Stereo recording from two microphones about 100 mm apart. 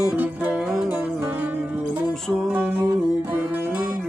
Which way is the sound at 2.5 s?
15° right (ahead or behind).